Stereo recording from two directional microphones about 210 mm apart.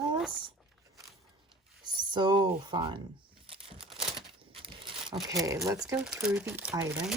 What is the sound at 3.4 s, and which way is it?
Crumpling, 25° right (ahead or behind).